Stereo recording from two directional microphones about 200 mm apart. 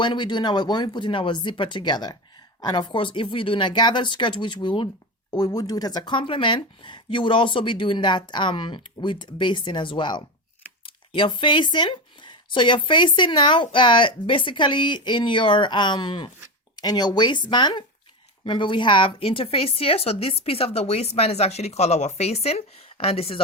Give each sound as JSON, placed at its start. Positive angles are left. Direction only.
{"t": 0.0, "sound": "speech", "side_deg": 25}